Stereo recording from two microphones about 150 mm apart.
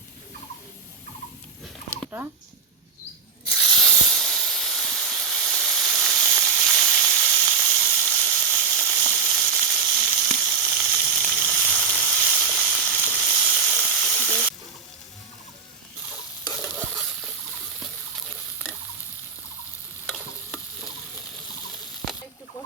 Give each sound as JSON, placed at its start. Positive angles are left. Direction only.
{"t": 2.0, "sound": "speech", "side_deg": -15}
{"t": 3.5, "sound": "hiss", "side_deg": 0}
{"t": 13.2, "sound": "steam", "side_deg": 5}
{"t": 16.4, "sound": "stir", "side_deg": 15}
{"t": 17.0, "sound": "water", "side_deg": 0}
{"t": 17.7, "sound": "a sound", "side_deg": 0}
{"t": 20.1, "sound": "stir", "side_deg": 5}